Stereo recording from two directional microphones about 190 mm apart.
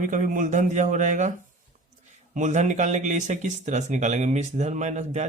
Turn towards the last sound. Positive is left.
turn(degrees=-35)  # may be behind; listen again after turning